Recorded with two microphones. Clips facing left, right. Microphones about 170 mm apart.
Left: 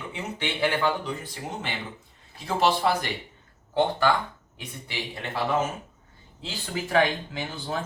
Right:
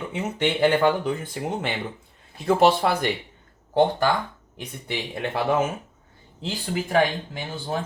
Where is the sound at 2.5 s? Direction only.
55° right (ahead or behind).